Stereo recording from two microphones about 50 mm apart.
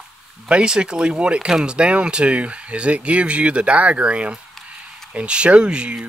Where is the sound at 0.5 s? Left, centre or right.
Centre.